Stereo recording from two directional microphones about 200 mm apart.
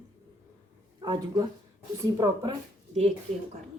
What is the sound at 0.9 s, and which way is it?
A woman's voice, 20° right (ahead or behind).